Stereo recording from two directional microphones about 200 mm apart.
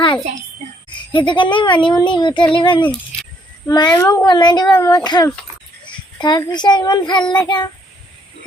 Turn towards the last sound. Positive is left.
turn(degrees=20)  # may be behind; listen again after turning